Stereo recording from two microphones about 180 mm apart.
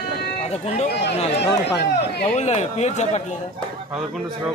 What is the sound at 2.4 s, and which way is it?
Speech, 40° left (ahead or behind).